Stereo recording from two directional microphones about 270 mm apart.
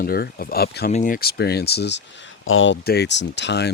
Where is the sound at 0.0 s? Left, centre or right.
Left.